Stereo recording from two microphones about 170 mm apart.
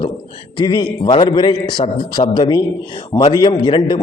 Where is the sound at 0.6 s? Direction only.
25° left (ahead or behind).